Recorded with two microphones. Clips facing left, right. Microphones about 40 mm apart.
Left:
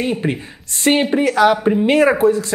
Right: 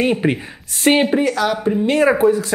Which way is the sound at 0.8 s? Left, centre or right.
Centre.